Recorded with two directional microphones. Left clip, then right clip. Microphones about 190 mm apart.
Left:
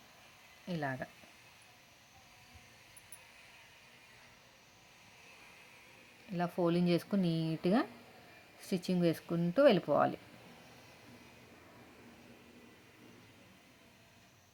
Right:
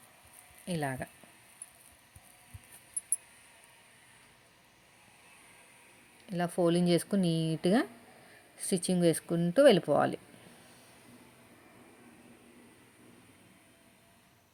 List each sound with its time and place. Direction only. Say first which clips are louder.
0.7 s speech: right 3 dB; 30° right (ahead or behind)
6.3 s speech: right 4 dB; 25° right (ahead or behind)